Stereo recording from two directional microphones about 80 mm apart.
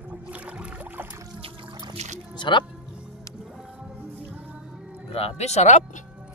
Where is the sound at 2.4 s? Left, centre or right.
Left.